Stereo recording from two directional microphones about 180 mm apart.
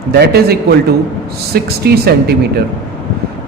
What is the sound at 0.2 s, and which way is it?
A man's voice, 60° right (ahead or behind).